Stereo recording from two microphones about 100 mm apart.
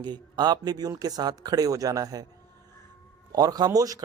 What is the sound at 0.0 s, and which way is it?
A man's voice, 45° right (ahead or behind).